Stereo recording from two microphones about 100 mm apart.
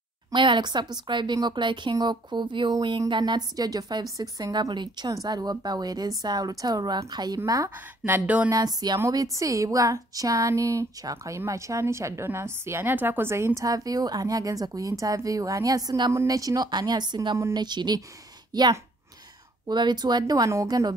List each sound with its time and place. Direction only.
0.3 s a woman's voice: 55° right (ahead or behind); by 7.7 s 35° right (ahead or behind)
7.7 s speech: 20° right (ahead or behind)
8.5 s a woman's voice: 40° right (ahead or behind)